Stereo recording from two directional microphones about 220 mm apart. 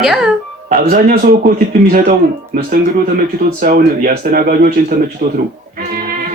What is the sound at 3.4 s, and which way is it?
Speech, 40° right (ahead or behind).